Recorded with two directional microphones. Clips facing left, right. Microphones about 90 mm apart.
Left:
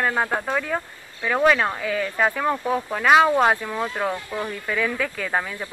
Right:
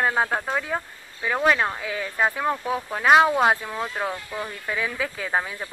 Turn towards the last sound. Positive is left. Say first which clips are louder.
# left 1 dB
turn(degrees=-10)  # may be behind; listen again after turning